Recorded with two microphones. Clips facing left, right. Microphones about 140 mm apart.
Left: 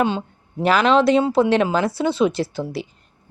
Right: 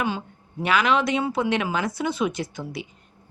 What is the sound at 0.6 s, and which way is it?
Speech, 35° left (ahead or behind).